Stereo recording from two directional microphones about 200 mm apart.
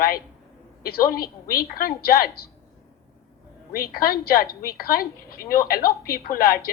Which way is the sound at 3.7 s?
45° left (ahead or behind).